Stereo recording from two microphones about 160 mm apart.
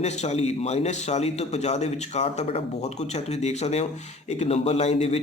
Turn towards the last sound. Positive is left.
turn(degrees=40)  # may be behind; listen again after turning